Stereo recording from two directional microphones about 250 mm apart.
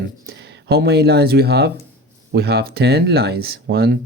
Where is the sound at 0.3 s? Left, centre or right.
Right.